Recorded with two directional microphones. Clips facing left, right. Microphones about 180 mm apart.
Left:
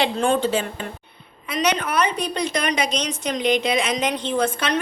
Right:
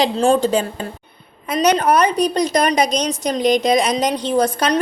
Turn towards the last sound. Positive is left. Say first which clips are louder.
# right 5 dB
turn(degrees=-40)  # may be behind; listen again after turning